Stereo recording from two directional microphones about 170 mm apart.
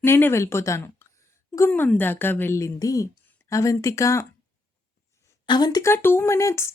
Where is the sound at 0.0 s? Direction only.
15° left (ahead or behind).